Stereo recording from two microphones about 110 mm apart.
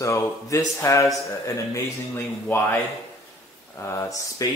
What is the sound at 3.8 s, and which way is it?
Speech, 25° left (ahead or behind).